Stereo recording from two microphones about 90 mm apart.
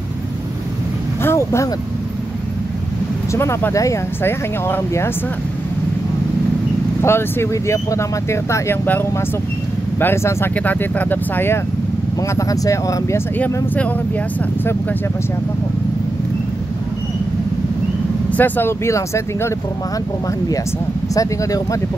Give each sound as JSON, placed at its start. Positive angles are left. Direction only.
{"t": 1.2, "sound": "vehicle", "side_deg": 30}
{"t": 3.3, "sound": "speech", "side_deg": 30}
{"t": 4.2, "sound": "speech", "side_deg": 25}
{"t": 7.0, "sound": "speech", "side_deg": 30}
{"t": 9.9, "sound": "speech", "side_deg": 25}
{"t": 12.2, "sound": "speech", "side_deg": 40}
{"t": 13.4, "sound": "speech", "side_deg": 15}
{"t": 18.3, "sound": "speech", "side_deg": 25}
{"t": 21.1, "sound": "speech", "side_deg": 40}